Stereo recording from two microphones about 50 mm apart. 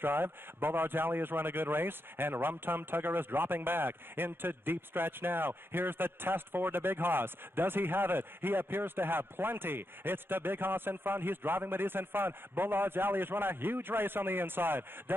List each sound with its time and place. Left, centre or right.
0.0 s speech: right